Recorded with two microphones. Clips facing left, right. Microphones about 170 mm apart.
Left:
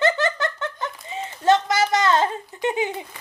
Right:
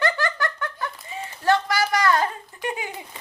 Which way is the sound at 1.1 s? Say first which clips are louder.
Left 3 dB; 20° left (ahead or behind).